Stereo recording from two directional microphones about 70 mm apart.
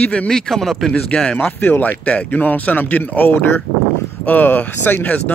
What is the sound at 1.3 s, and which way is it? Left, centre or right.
Speech, left.